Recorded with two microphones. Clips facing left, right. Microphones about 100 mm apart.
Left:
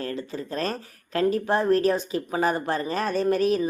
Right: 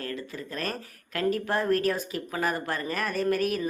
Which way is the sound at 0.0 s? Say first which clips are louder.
Left 4 dB; 30° left (ahead or behind).